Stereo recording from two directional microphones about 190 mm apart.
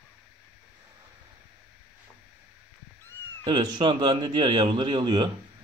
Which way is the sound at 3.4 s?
25° right (ahead or behind).